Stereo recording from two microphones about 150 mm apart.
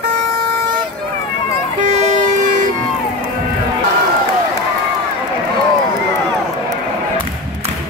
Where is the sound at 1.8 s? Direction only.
50° right (ahead or behind).